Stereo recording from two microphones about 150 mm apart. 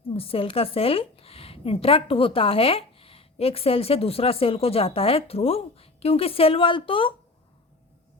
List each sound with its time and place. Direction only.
0.1 s a woman's voice: 40° left (ahead or behind)